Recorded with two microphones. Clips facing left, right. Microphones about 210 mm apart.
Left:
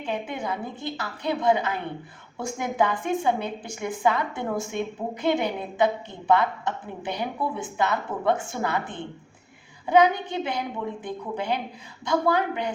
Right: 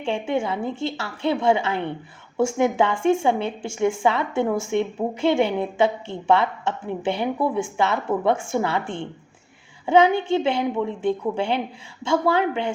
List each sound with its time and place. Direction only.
0.0 s a woman's voice: 25° right (ahead or behind)